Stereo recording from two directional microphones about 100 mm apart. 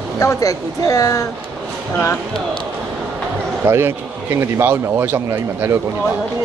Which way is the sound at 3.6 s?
25° right (ahead or behind).